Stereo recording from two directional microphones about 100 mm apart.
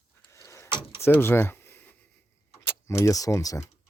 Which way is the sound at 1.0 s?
25° left (ahead or behind).